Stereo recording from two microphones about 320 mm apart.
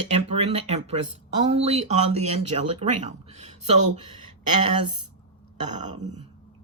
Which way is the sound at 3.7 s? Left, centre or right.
Right.